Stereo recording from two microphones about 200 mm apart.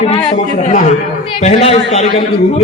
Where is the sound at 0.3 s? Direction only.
35° left (ahead or behind).